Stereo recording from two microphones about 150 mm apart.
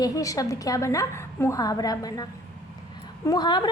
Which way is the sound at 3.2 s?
30° left (ahead or behind).